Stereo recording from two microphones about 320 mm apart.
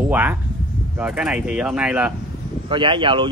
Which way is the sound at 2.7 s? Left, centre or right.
Centre.